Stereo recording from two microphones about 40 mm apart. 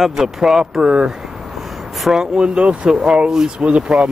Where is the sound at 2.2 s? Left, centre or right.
Right.